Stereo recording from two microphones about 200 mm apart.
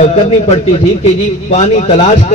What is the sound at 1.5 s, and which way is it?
Speech, 35° left (ahead or behind).